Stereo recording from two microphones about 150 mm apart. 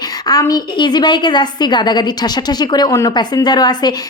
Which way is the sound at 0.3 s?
25° left (ahead or behind).